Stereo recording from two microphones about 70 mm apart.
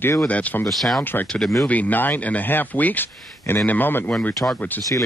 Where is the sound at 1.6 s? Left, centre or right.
Left.